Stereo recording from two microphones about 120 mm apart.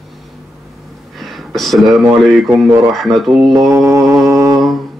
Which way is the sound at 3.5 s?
30° right (ahead or behind).